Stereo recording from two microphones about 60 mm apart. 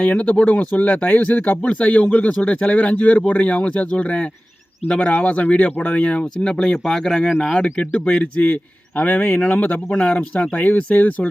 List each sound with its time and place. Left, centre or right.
0.0 s speech: left
7.6 s speech: left